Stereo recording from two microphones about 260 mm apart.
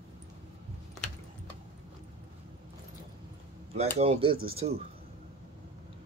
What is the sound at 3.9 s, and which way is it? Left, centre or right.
Speech, right.